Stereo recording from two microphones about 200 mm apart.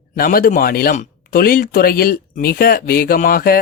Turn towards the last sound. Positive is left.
turn(degrees=50)  # may be behind; listen again after turning